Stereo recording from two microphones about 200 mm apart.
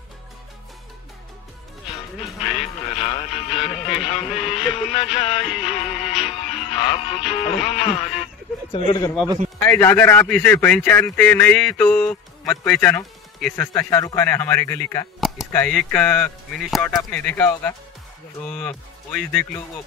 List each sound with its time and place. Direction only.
3.0 s music: 30° left (ahead or behind)
9.7 s speech: 10° left (ahead or behind)
15.1 s a sound: centre (ahead or behind)
15.5 s speech: 5° left (ahead or behind)